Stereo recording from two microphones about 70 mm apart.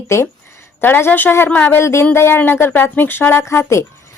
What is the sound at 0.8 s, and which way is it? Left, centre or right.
Speech, left.